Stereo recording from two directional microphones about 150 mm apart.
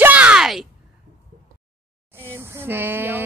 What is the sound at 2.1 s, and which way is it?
A woman's voice, 15° right (ahead or behind).